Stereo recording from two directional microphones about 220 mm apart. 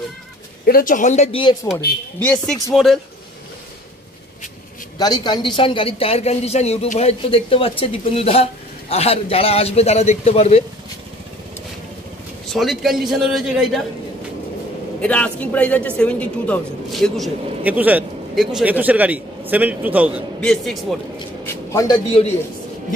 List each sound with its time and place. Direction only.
0.7 s speech: 40° left (ahead or behind); by 1.6 s 25° left (ahead or behind)
2.1 s speech: 5° left (ahead or behind)
4.9 s a man's voice: 20° left (ahead or behind)
12.5 s speech: centre (ahead or behind)
15.0 s a man's voice: 5° left (ahead or behind)
21.5 s a sound: 15° left (ahead or behind)